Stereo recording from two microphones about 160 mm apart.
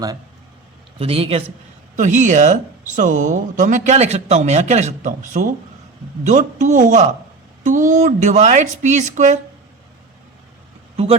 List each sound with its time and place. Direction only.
0.9 s a man's voice: 35° right (ahead or behind)
2.0 s a woman's voice: 50° right (ahead or behind)
10.9 s speech: 40° right (ahead or behind)